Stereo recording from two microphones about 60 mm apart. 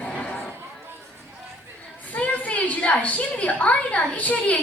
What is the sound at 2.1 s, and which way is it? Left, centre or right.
A woman's voice, left.